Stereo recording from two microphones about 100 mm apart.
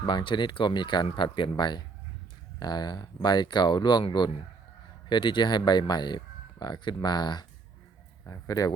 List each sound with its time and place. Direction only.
0.0 s speech: 55° left (ahead or behind)
5.0 s speech: 50° left (ahead or behind)